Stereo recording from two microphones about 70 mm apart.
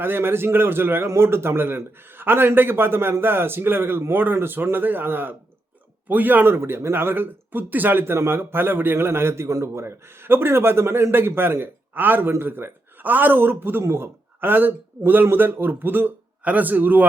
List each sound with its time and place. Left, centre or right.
0.0 s speech: right